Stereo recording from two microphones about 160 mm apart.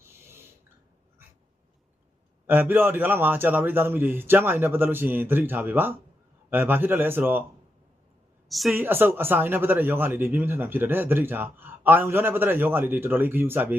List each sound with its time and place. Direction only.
0.0 s a sound: 15° right (ahead or behind)
2.5 s speech: 10° right (ahead or behind)
8.4 s a woman's voice: centre (ahead or behind)
8.7 s speech: 10° right (ahead or behind)